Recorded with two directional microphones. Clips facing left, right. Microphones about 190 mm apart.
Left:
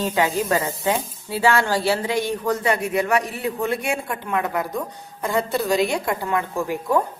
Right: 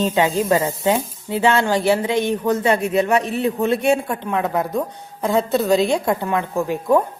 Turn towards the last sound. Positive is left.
turn(degrees=-20)  # may be behind; listen again after turning